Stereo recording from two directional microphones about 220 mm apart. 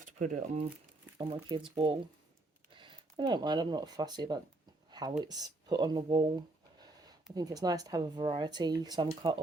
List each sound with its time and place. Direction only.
0.0 s speech: 35° right (ahead or behind)
1.3 s speech: 20° right (ahead or behind)
4.9 s a sound: 20° right (ahead or behind)
5.2 s speech: 20° right (ahead or behind)